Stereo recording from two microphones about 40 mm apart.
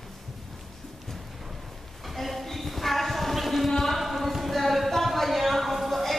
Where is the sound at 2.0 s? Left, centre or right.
Centre.